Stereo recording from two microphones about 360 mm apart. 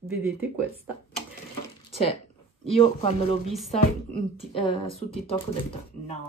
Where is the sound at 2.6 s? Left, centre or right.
Centre.